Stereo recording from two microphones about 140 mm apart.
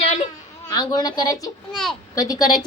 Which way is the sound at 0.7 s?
30° left (ahead or behind).